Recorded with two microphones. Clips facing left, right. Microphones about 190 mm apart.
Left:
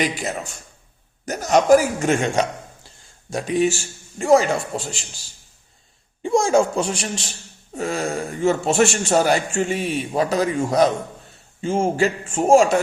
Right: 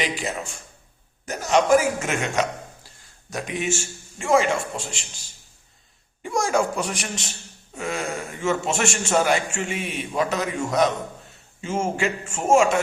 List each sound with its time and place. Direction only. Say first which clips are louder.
0.0 s a man's voice: left 3 dB; 45° left (ahead or behind)
6.2 s a woman's voice: left 5 dB; 25° left (ahead or behind)